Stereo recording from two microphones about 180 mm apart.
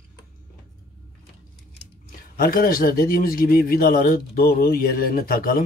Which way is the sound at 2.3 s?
55° left (ahead or behind).